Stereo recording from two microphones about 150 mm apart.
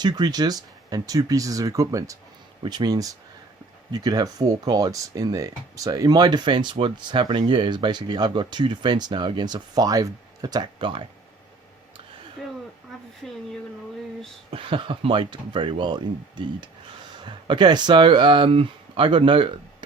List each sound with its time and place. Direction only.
0.0 s speech: 30° right (ahead or behind)
14.5 s speech: 35° right (ahead or behind)